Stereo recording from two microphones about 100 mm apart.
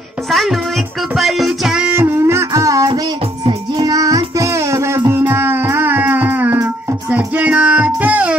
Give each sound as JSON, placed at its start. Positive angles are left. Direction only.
{"t": 0.3, "sound": "music", "side_deg": 0}
{"t": 2.0, "sound": "music", "side_deg": -25}